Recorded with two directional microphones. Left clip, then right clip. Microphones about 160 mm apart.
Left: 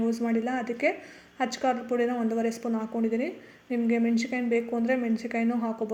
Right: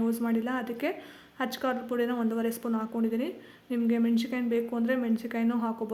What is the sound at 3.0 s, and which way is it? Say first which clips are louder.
Speech: left 4 dB; 55° right (ahead or behind).